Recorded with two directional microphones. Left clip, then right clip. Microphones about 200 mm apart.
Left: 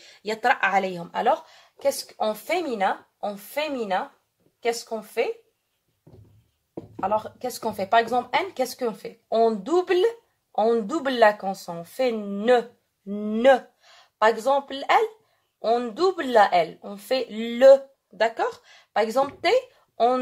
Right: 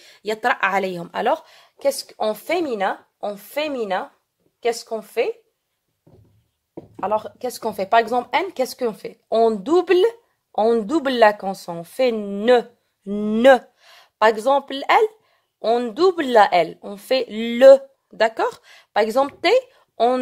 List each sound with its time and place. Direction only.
0.0 s a woman's voice: 50° right (ahead or behind)
7.0 s a woman's voice: 50° right (ahead or behind)